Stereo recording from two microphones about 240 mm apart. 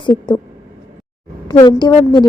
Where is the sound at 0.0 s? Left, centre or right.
Centre.